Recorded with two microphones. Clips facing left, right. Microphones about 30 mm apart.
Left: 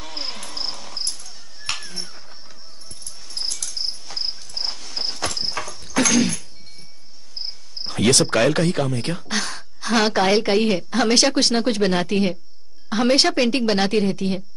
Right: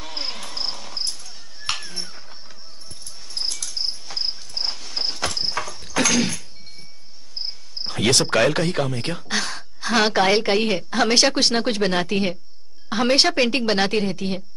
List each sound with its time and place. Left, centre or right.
0.0 s cricket: centre
3.3 s cricket: centre
7.8 s a woman's voice: centre